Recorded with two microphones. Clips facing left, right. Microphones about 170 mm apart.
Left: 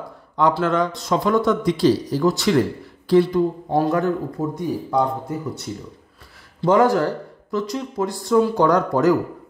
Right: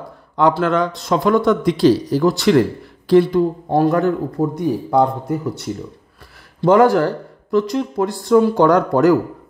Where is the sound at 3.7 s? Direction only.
60° right (ahead or behind).